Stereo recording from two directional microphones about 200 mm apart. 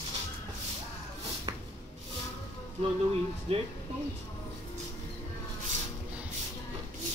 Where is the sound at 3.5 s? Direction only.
30° right (ahead or behind).